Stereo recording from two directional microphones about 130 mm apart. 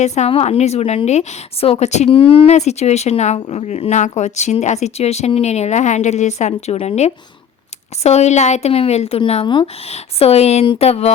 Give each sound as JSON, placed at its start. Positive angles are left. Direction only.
{"t": 0.0, "sound": "speech", "side_deg": 60}
{"t": 2.0, "sound": "speech", "side_deg": 45}
{"t": 2.5, "sound": "speech", "side_deg": 60}